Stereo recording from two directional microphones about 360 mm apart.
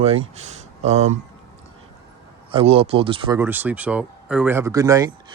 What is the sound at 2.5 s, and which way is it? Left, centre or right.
Speech, centre.